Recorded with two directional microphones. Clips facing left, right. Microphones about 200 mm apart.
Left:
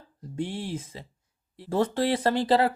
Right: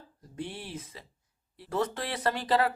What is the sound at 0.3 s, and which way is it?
Speech, 25° left (ahead or behind).